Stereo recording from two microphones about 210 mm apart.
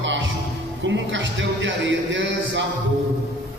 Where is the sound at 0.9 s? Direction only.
60° right (ahead or behind).